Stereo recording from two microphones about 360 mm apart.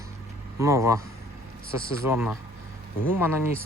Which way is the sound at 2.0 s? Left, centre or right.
Centre.